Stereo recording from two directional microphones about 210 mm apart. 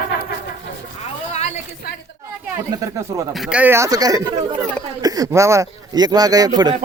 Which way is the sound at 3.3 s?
5° right (ahead or behind).